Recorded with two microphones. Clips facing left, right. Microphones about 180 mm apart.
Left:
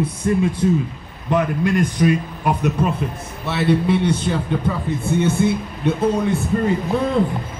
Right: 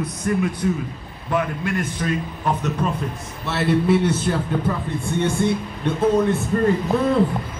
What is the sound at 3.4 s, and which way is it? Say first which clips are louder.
Speech: left 1 dB; centre (ahead or behind).